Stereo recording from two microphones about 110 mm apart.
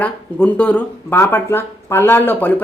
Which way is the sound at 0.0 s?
10° left (ahead or behind).